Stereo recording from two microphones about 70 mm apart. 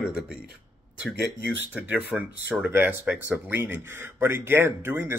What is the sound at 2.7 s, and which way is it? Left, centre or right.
Speech, right.